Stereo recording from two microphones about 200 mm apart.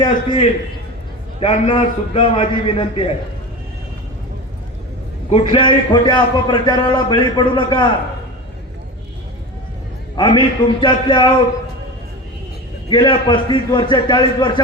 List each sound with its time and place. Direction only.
0.0 s a man's voice: 25° left (ahead or behind)
5.3 s a man's voice: 25° left (ahead or behind)
10.2 s a man's voice: 25° left (ahead or behind)
12.9 s a man's voice: 25° left (ahead or behind)